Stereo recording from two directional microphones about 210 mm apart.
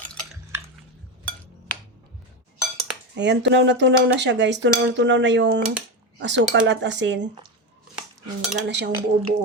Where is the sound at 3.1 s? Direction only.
55° right (ahead or behind).